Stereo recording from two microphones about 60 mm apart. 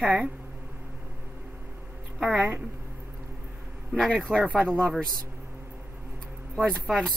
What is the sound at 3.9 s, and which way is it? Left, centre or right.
Speech, right.